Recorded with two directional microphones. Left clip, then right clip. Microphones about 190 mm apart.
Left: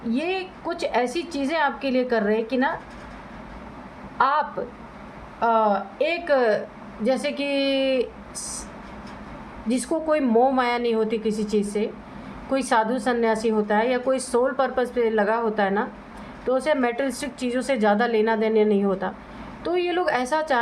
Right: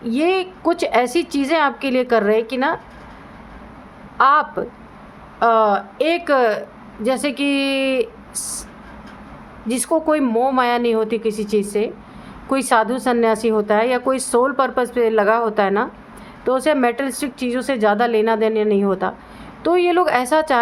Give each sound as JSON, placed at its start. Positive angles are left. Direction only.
{"t": 0.1, "sound": "a woman's voice", "side_deg": -45}
{"t": 4.2, "sound": "a woman's voice", "side_deg": -40}
{"t": 9.6, "sound": "a woman's voice", "side_deg": -40}